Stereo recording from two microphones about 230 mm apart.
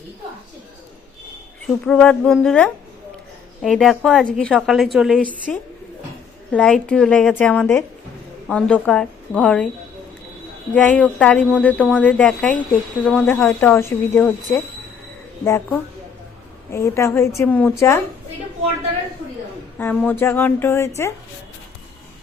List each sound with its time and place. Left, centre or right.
1.6 s a woman's voice: centre
10.8 s a woman's voice: centre
19.8 s speech: centre